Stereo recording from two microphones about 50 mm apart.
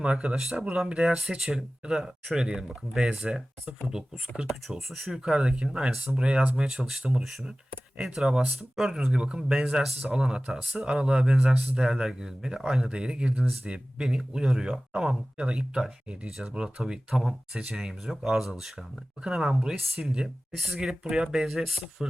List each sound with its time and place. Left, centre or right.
0.0 s speech: right
4.7 s speech: centre
5.3 s speech: centre
9.1 s speech: centre
12.9 s speech: centre
18.0 s speech: centre